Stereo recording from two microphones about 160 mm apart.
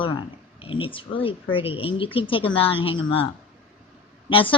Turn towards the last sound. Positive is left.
turn(degrees=35)  # may be behind; listen again after turning